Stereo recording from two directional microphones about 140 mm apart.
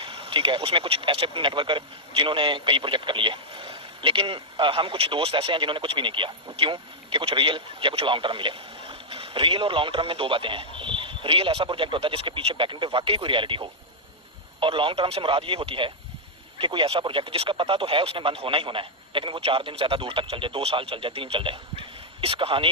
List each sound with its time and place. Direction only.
0.0 s speech: 40° right (ahead or behind)